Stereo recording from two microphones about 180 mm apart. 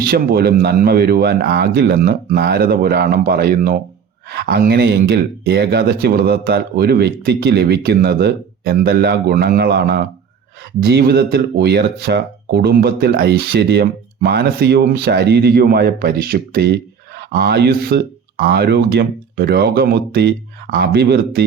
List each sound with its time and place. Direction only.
0.0 s speech: 60° right (ahead or behind)